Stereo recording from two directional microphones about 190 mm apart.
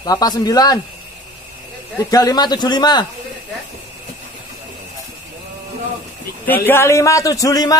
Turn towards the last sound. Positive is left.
turn(degrees=20)  # may be behind; listen again after turning